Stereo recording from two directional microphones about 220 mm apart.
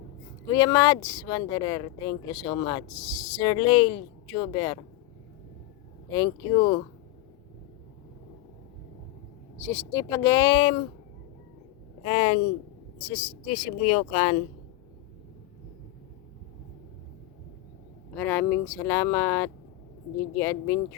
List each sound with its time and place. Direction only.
0.5 s speech: 15° left (ahead or behind)
6.1 s speech: 20° left (ahead or behind)
9.6 s speech: 10° left (ahead or behind)
12.0 s speech: 30° left (ahead or behind)
18.1 s speech: 10° left (ahead or behind)